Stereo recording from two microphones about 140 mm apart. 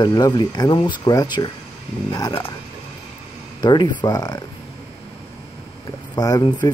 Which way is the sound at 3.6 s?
35° left (ahead or behind).